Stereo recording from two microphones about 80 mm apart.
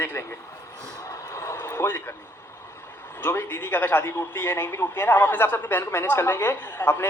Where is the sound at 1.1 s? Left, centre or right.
Left.